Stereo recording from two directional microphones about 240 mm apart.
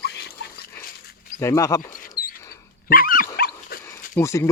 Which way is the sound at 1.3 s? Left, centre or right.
Centre.